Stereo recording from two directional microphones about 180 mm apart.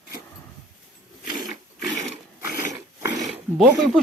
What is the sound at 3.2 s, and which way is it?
Roaring cats, centre (ahead or behind).